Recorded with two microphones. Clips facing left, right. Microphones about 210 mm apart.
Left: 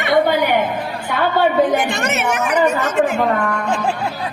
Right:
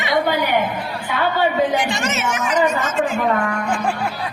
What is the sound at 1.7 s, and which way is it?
A woman's voice, 55° left (ahead or behind).